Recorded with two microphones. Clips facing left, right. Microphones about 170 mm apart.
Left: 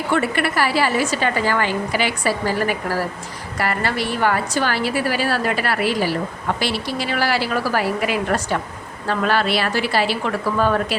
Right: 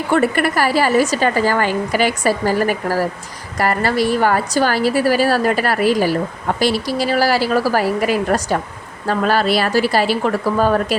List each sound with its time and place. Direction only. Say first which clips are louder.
0.1 s a woman's voice: right 5 dB; 45° right (ahead or behind)